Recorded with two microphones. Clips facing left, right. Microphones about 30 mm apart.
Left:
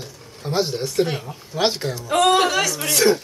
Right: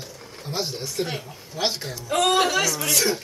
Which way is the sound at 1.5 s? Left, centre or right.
Centre.